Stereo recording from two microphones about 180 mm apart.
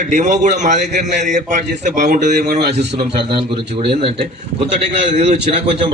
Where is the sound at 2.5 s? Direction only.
65° right (ahead or behind).